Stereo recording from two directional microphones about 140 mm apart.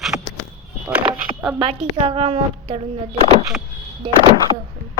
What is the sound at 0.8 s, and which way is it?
Music, 10° right (ahead or behind).